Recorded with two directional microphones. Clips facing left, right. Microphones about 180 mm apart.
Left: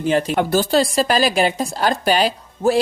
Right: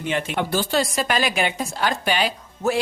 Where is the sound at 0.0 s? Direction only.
35° left (ahead or behind).